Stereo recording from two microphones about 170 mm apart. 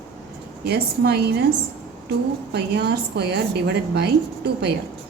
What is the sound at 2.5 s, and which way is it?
A woman's voice, 75° right (ahead or behind).